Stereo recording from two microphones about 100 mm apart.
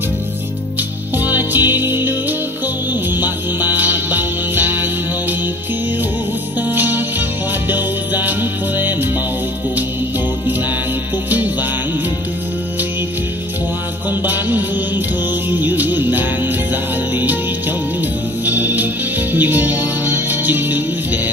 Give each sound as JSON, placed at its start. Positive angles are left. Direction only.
{"t": 1.1, "sound": "music", "side_deg": -20}
{"t": 3.2, "sound": "music", "side_deg": -20}
{"t": 6.7, "sound": "music", "side_deg": -20}
{"t": 14.2, "sound": "music", "side_deg": -20}
{"t": 15.6, "sound": "music", "side_deg": -20}
{"t": 18.4, "sound": "music", "side_deg": -20}